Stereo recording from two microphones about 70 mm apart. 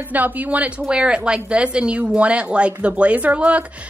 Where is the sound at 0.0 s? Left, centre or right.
Right.